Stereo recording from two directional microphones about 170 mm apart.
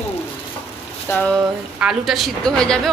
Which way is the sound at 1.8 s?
Centre (ahead or behind).